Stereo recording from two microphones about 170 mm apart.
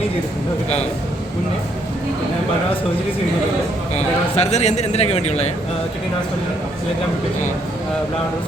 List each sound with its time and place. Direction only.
3.9 s a man's voice: 40° left (ahead or behind)